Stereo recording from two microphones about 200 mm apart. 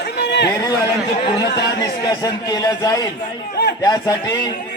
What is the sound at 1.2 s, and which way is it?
A man's voice, 20° left (ahead or behind).